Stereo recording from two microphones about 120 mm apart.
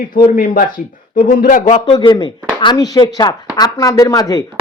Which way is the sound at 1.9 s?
35° left (ahead or behind).